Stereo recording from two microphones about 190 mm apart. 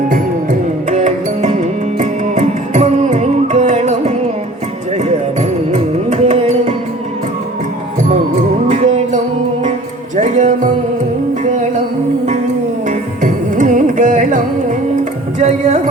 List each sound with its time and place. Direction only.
0.9 s music: 40° right (ahead or behind)
8.6 s music: 40° right (ahead or behind)
12.9 s carnatic music: 40° right (ahead or behind)
15.4 s music: 35° right (ahead or behind)